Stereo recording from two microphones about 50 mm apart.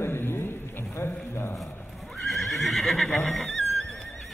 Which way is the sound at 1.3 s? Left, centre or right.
Left.